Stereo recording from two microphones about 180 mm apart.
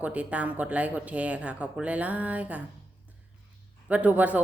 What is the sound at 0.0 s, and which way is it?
A man's voice, 10° right (ahead or behind).